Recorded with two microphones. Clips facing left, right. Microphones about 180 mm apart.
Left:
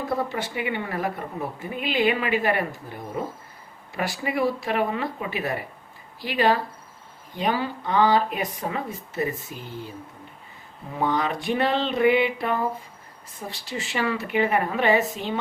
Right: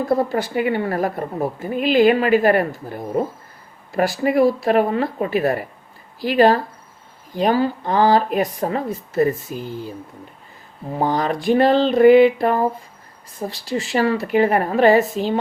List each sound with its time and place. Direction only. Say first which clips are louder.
0.1 s a woman's voice: right 9 dB; 40° right (ahead or behind)
10.9 s a woman's voice: right 4 dB; 35° right (ahead or behind)